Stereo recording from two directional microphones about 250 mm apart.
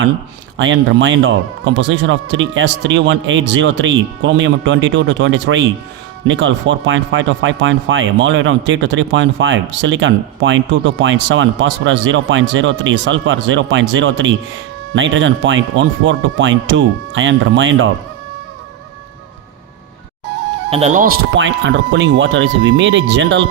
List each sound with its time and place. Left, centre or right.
0.6 s speech: right
20.7 s speech: right
21.9 s speech: right